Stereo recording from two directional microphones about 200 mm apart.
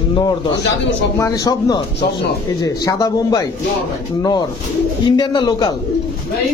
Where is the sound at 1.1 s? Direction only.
15° left (ahead or behind).